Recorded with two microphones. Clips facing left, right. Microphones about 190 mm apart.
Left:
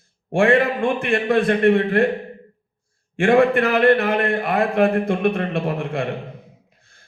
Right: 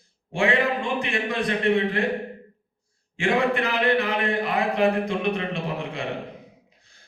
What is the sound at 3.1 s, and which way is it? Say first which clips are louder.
A man's voice: left 7 dB; 55° left (ahead or behind).